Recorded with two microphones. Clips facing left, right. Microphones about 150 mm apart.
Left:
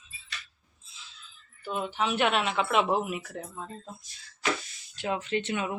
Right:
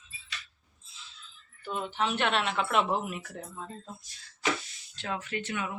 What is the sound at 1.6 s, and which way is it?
Speech, 10° left (ahead or behind).